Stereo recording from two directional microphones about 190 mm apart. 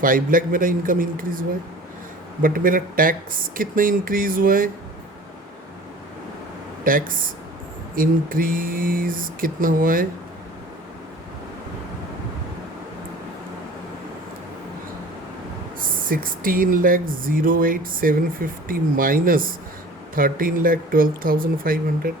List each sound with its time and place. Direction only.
0.0 s speech: 45° right (ahead or behind)
6.9 s speech: 45° right (ahead or behind)
16.0 s speech: 50° right (ahead or behind)